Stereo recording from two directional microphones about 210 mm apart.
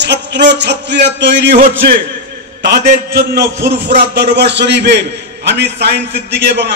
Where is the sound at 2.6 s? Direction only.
40° right (ahead or behind).